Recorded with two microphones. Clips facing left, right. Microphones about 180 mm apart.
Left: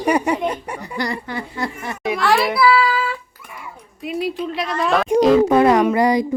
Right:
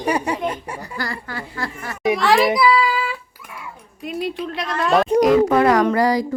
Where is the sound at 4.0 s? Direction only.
Centre (ahead or behind).